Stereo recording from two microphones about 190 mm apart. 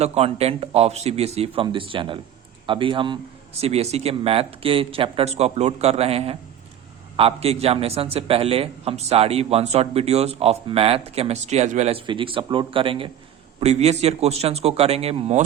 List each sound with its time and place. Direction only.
0.0 s a man's voice: 35° right (ahead or behind)